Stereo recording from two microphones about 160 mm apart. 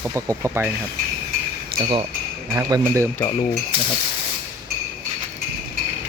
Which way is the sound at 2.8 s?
15° right (ahead or behind).